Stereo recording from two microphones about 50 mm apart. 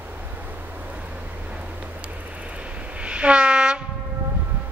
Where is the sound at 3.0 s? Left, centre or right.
Right.